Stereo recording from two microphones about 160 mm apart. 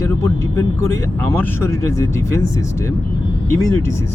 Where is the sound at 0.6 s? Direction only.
20° left (ahead or behind).